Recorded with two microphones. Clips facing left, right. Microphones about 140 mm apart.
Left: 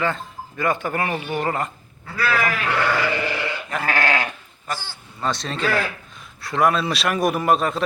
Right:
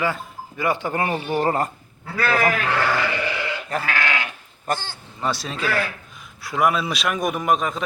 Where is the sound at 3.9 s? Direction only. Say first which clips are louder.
Left 7 dB; 40° left (ahead or behind).